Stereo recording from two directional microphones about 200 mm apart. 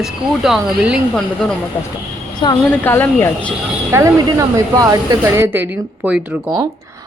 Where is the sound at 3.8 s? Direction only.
15° right (ahead or behind).